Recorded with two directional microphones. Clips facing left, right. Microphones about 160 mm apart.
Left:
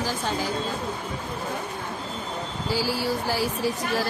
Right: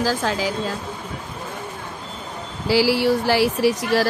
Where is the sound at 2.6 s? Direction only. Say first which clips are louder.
Right 9 dB; 85° right.